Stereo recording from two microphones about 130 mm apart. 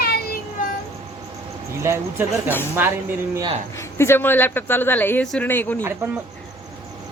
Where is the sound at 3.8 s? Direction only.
20° left (ahead or behind).